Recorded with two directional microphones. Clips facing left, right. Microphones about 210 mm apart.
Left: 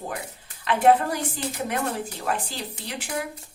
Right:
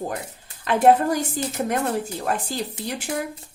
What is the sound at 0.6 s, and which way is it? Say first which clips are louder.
A woman's voice: right 2 dB; 45° right (ahead or behind).